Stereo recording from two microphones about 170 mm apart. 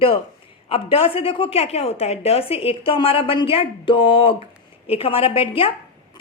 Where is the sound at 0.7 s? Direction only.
35° left (ahead or behind).